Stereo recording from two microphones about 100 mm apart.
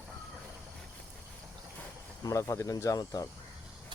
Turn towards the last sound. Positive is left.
turn(degrees=40)  # may be behind; listen again after turning